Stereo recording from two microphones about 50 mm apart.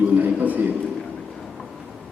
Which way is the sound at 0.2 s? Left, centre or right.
Right.